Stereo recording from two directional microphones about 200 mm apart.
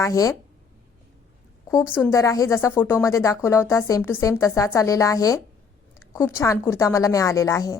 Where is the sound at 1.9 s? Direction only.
15° left (ahead or behind).